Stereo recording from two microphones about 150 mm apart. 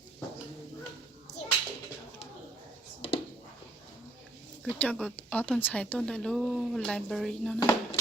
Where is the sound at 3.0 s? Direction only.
35° left (ahead or behind).